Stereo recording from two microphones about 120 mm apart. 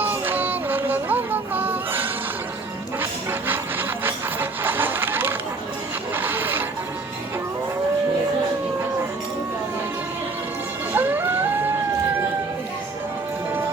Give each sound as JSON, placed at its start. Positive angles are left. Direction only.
{"t": 0.0, "sound": "music", "side_deg": -15}
{"t": 3.0, "sound": "wood", "side_deg": -15}
{"t": 6.1, "sound": "music", "side_deg": -15}
{"t": 10.9, "sound": "music", "side_deg": -15}